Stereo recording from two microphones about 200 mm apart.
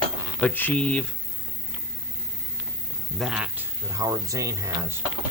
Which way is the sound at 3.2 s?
5° right (ahead or behind).